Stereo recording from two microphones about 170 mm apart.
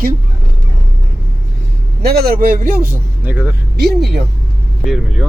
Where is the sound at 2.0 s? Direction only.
65° right (ahead or behind).